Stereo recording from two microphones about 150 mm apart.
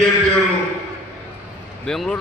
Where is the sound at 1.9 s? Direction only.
Centre (ahead or behind).